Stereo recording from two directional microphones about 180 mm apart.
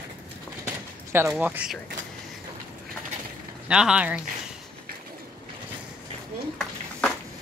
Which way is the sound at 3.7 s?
5° right (ahead or behind).